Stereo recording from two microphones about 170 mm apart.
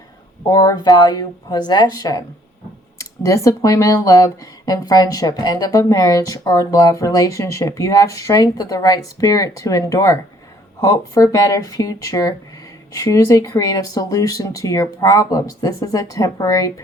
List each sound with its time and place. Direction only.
0.4 s speech: 20° left (ahead or behind)